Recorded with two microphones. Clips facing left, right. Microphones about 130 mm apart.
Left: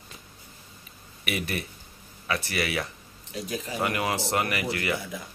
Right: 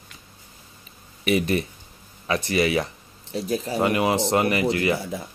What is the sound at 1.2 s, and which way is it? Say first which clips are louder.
Speech: right 9 dB; 30° right (ahead or behind).